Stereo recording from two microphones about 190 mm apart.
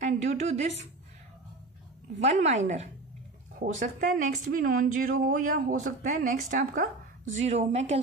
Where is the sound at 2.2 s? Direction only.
35° right (ahead or behind).